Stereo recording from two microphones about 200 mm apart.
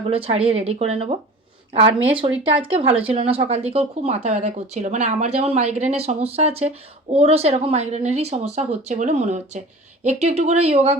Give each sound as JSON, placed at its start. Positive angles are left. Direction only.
{"t": 0.1, "sound": "speech", "side_deg": -30}